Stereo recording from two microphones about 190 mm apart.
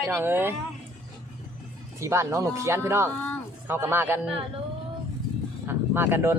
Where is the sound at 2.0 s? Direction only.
15° right (ahead or behind).